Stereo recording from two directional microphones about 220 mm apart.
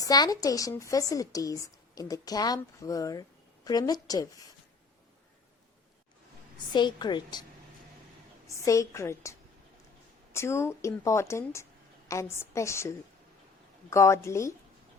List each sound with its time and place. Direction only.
0.0 s speech: 15° left (ahead or behind)
6.7 s a woman's voice: 20° left (ahead or behind)
8.4 s speech: 15° left (ahead or behind)
10.3 s speech: 10° left (ahead or behind)